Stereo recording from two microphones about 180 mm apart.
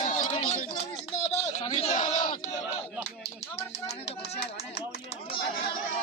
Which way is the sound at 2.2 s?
45° left (ahead or behind).